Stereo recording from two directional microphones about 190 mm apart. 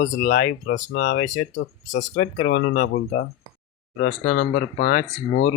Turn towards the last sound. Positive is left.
turn(degrees=40)  # may be behind; listen again after turning